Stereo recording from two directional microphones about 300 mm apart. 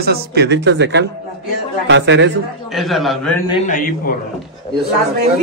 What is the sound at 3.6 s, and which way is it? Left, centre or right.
Speech, left.